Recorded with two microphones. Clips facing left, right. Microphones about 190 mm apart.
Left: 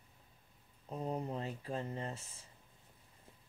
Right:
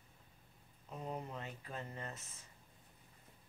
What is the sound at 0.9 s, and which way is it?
Speech, 35° left (ahead or behind).